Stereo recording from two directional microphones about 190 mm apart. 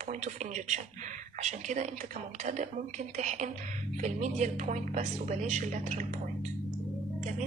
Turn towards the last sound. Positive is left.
turn(degrees=-40)  # may be behind; listen again after turning